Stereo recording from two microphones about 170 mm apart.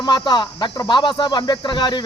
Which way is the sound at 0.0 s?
25° left (ahead or behind).